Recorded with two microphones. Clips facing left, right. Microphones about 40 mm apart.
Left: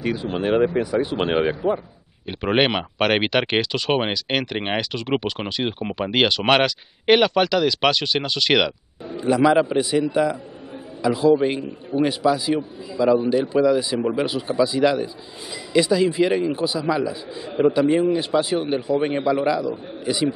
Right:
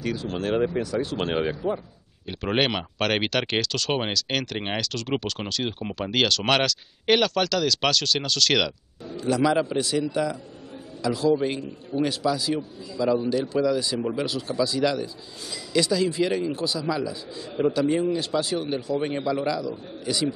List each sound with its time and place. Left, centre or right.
0.0 s speech: left